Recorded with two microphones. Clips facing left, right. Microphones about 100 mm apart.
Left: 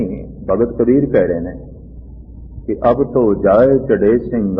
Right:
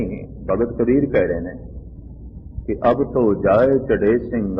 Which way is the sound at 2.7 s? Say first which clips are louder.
Left 4 dB; 5° left (ahead or behind).